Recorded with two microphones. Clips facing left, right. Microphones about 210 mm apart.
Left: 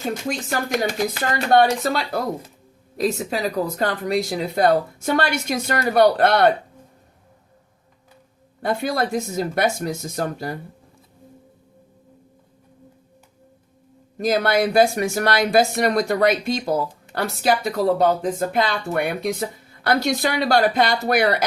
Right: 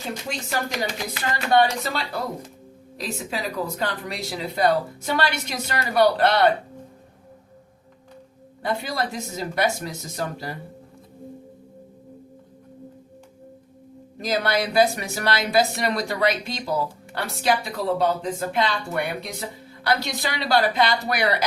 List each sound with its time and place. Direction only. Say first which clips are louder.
0.3 s speech: left 3 dB; 50° left (ahead or behind)
8.6 s speech: left 4 dB; 50° left (ahead or behind)
14.2 s speech: left 5 dB; 50° left (ahead or behind)